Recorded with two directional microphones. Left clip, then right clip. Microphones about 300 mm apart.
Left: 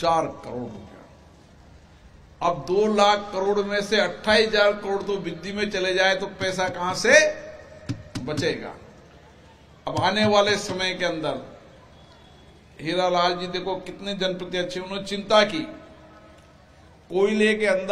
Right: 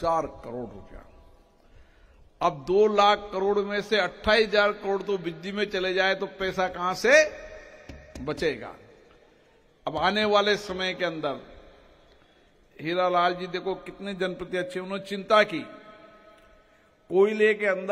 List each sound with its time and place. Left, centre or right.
0.0 s a man's voice: right
2.3 s a man's voice: right
8.3 s a man's voice: right
9.8 s a man's voice: right
12.7 s a man's voice: right
17.1 s a man's voice: right